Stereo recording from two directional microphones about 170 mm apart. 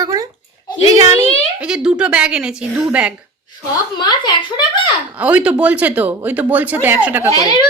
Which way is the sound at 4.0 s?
25° left (ahead or behind).